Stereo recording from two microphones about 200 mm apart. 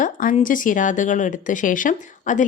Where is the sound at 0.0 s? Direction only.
40° left (ahead or behind).